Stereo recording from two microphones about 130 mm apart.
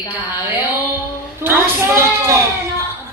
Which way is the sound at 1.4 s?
20° right (ahead or behind).